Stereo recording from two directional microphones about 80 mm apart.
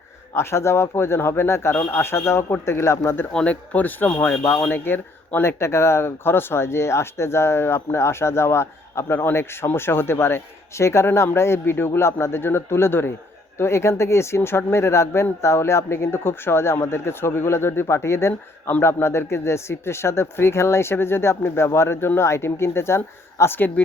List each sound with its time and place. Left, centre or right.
0.3 s speech: left
3.3 s speech: centre